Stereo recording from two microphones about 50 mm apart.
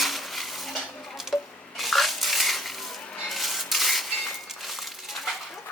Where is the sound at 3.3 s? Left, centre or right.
Centre.